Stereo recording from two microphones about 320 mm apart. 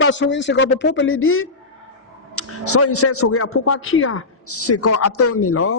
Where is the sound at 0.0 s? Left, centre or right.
Left.